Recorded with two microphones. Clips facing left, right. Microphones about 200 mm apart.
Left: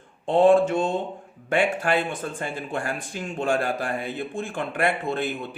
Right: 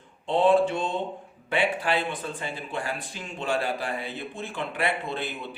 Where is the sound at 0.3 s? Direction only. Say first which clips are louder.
Left 4 dB; 50° left (ahead or behind).